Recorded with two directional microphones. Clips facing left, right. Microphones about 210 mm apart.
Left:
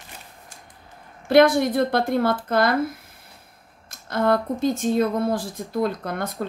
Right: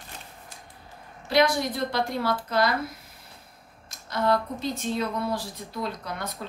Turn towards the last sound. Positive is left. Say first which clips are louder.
# left 6 dB
turn(degrees=50)  # may be behind; listen again after turning